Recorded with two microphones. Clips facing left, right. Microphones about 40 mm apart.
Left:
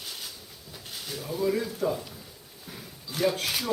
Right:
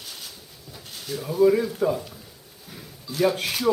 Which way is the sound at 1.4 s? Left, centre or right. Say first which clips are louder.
Right 7 dB; centre.